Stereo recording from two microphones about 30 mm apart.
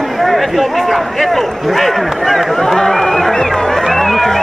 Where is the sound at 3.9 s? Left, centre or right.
Centre.